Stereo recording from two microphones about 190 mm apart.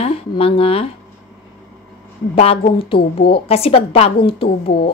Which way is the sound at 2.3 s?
30° left (ahead or behind).